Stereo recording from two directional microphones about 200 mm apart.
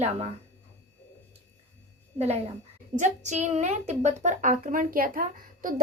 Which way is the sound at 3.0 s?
35° right (ahead or behind).